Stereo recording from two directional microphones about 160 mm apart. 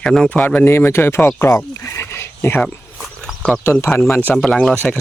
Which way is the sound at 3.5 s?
15° left (ahead or behind).